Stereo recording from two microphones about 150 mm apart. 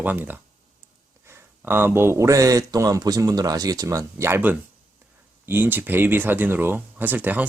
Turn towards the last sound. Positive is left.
turn(degrees=-10)  # may be behind; listen again after turning